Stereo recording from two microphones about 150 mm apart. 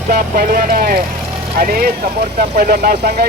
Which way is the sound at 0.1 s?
80° right.